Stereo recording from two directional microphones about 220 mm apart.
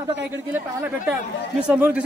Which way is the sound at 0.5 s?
10° right (ahead or behind).